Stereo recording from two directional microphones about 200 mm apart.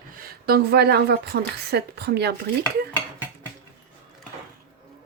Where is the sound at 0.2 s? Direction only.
50° right (ahead or behind).